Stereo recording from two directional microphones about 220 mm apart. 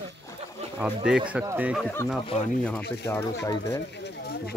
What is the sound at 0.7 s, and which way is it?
Speech, 5° right (ahead or behind).